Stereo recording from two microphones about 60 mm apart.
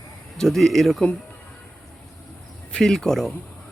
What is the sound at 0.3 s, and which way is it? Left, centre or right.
Speech, centre.